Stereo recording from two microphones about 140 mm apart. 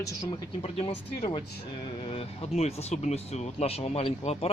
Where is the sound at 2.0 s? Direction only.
45° left (ahead or behind).